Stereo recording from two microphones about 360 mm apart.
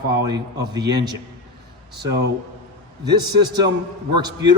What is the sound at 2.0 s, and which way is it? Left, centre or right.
Speech, right.